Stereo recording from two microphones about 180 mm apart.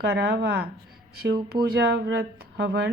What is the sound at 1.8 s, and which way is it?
Speech, 70° right (ahead or behind).